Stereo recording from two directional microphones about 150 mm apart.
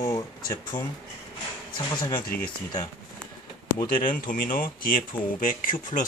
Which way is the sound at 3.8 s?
65° left (ahead or behind).